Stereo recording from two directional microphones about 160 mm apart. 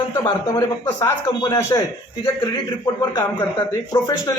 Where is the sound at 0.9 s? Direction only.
20° left (ahead or behind).